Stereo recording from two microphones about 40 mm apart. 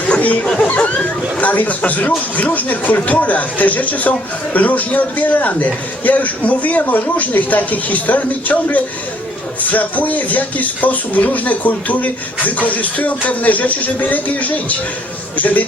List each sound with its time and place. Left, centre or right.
0.4 s speech: centre
0.7 s a man's voice: left